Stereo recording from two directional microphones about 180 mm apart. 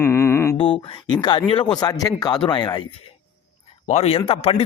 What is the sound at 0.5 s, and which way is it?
A man's voice, 30° left (ahead or behind).